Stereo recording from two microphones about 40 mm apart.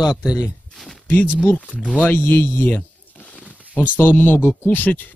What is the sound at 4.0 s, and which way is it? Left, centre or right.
Speech, left.